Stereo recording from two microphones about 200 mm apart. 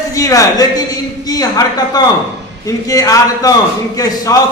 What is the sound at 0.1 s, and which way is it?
A man's voice, 15° left (ahead or behind).